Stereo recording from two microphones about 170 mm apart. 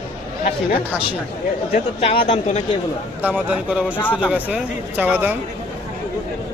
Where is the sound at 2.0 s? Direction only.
35° left (ahead or behind).